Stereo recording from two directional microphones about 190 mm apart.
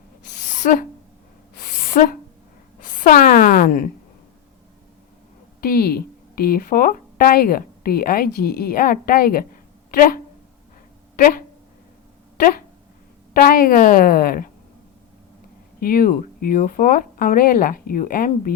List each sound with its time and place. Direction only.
0.6 s a woman's voice: 45° left (ahead or behind)
1.6 s a sound: 45° left (ahead or behind)
2.8 s a woman's voice: 45° left (ahead or behind)
5.5 s a woman's voice: 50° left (ahead or behind)
11.2 s a woman's voice: 50° left (ahead or behind)
15.8 s a woman's voice: 50° left (ahead or behind)